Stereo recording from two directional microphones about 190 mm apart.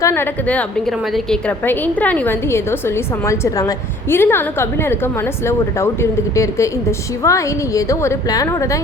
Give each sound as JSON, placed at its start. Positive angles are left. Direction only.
{"t": 0.0, "sound": "a woman's voice", "side_deg": 10}